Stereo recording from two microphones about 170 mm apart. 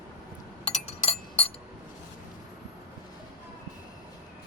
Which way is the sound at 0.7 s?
35° left (ahead or behind).